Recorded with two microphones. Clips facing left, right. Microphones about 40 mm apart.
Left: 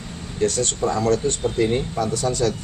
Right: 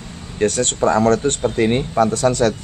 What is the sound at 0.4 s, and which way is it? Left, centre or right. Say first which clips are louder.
Speech: right 4 dB; right.